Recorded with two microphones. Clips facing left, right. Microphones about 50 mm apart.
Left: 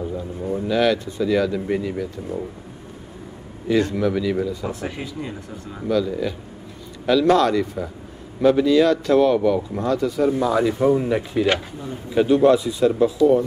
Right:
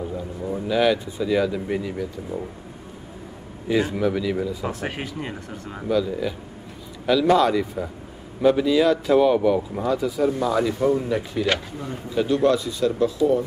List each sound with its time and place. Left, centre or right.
0.5 s speech: centre
3.6 s speech: centre
4.6 s speech: right
5.8 s a man's voice: centre